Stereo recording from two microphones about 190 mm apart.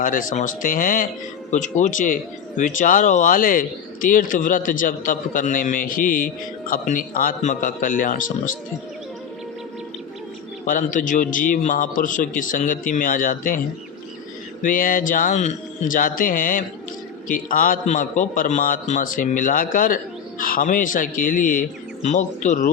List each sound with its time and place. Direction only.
0.0 s speech: 45° left (ahead or behind)
10.7 s speech: 45° left (ahead or behind)
14.6 s speech: 45° left (ahead or behind)